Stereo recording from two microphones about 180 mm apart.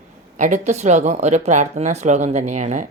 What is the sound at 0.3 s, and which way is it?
Speech, 45° right (ahead or behind).